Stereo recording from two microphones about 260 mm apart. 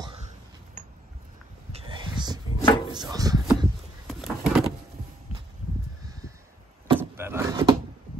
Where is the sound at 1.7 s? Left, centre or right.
Right.